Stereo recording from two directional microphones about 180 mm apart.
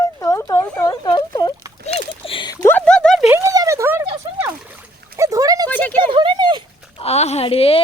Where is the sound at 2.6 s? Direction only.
10° left (ahead or behind).